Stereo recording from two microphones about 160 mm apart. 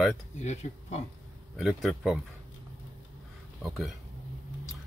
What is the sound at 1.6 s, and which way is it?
Speech, centre (ahead or behind).